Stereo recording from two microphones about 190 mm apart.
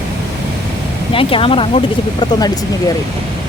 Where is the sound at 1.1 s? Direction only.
30° left (ahead or behind).